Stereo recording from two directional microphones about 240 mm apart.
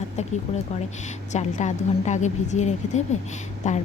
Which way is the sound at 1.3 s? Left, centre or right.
Left.